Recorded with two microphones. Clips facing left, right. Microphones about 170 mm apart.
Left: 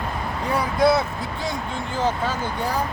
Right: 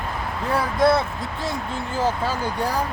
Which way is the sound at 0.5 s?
Centre (ahead or behind).